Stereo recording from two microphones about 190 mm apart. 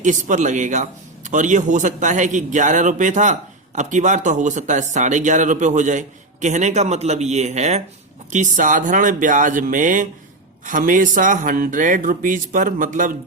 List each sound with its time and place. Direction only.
0.0 s speech: 40° right (ahead or behind)